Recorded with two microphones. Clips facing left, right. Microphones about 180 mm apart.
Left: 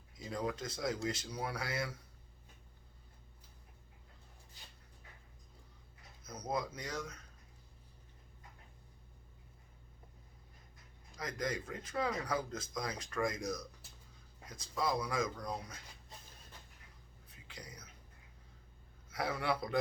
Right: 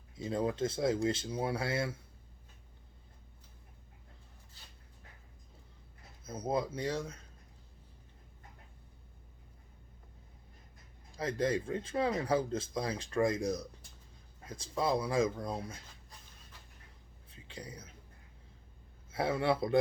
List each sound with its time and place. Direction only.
0.2 s speech: 25° right (ahead or behind)
6.2 s speech: 25° right (ahead or behind)
11.2 s speech: 30° right (ahead or behind)
17.2 s whispering: 30° right (ahead or behind)
19.1 s speech: 25° right (ahead or behind)